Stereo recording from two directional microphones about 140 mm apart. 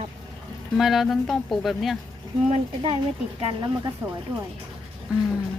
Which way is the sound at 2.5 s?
40° right (ahead or behind).